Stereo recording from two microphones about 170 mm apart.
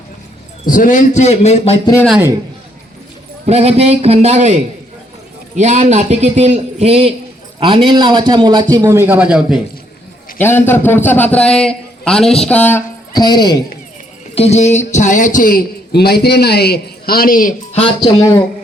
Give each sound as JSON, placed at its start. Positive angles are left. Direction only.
{"t": 0.6, "sound": "a man's voice", "side_deg": 55}
{"t": 1.8, "sound": "a man's voice", "side_deg": 20}
{"t": 3.4, "sound": "a man's voice", "side_deg": -40}
{"t": 10.3, "sound": "a man's voice", "side_deg": 15}
{"t": 13.1, "sound": "a man's voice", "side_deg": 25}
{"t": 14.3, "sound": "a man's voice", "side_deg": 40}
{"t": 17.7, "sound": "speech", "side_deg": 35}